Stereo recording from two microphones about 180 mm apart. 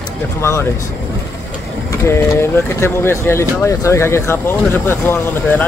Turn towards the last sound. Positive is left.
turn(degrees=10)  # may be behind; listen again after turning